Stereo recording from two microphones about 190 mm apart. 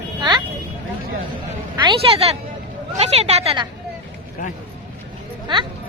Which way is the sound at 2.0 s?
30° right (ahead or behind).